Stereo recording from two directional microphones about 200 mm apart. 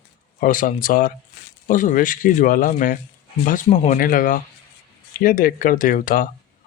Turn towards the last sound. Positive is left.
turn(degrees=45)  # may be behind; listen again after turning